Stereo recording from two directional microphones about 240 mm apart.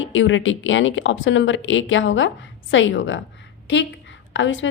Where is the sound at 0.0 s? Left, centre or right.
Left.